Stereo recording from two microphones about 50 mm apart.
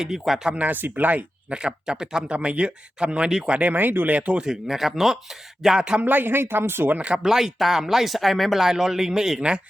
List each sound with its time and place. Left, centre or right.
0.0 s speech: centre
0.5 s speech: right
1.5 s speech: centre
3.5 s speech: right
4.4 s speech: centre
6.0 s speech: right
7.1 s speech: centre